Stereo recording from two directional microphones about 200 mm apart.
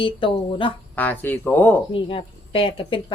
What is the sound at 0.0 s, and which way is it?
Speech, 25° left (ahead or behind).